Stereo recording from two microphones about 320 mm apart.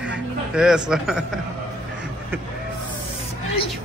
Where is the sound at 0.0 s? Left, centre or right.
Centre.